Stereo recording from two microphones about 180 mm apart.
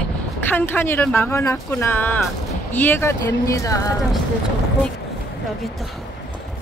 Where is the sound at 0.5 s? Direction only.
10° left (ahead or behind).